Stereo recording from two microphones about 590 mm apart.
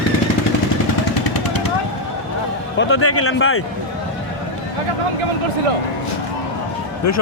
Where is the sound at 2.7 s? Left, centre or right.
Centre.